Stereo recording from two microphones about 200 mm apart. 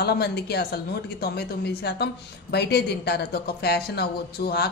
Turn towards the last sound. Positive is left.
turn(degrees=50)  # may be behind; listen again after turning